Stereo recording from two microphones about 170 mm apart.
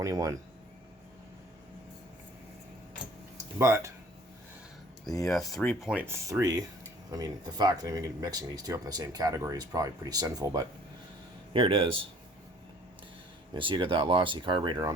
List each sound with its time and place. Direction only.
0.0 s speech: 20° right (ahead or behind)
3.6 s speech: 15° right (ahead or behind)
5.2 s speech: centre (ahead or behind); by 10.7 s 20° right (ahead or behind)
11.5 s speech: 30° right (ahead or behind)
13.5 s speech: 30° right (ahead or behind)